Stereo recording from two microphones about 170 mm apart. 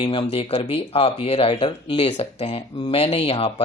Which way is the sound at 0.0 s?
30° left (ahead or behind).